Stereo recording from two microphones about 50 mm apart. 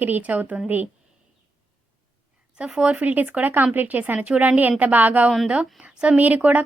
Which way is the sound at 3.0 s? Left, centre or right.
Right.